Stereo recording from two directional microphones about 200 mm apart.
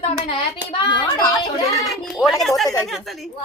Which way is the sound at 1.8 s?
Centre (ahead or behind).